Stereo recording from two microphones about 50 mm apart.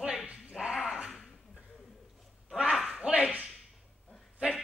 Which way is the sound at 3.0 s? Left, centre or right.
Right.